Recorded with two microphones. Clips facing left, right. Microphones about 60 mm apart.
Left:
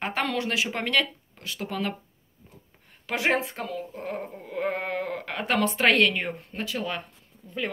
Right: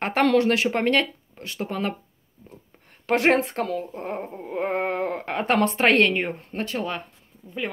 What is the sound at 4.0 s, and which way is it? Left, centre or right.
Speech, right.